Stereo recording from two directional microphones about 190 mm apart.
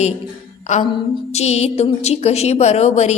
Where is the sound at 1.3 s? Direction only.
35° left (ahead or behind).